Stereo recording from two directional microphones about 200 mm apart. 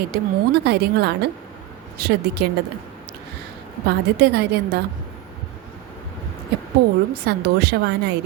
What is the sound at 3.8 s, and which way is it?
Speech, 55° right (ahead or behind).